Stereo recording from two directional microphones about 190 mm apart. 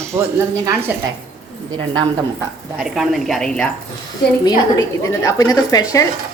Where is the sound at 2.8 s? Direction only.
5° right (ahead or behind).